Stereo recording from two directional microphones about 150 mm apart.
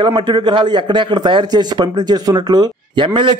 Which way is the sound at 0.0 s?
30° right (ahead or behind).